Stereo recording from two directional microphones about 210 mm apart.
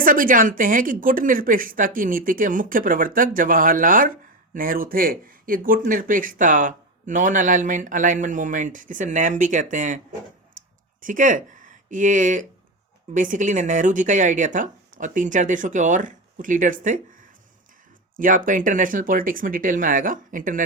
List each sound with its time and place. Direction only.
0.0 s speech: 40° right (ahead or behind)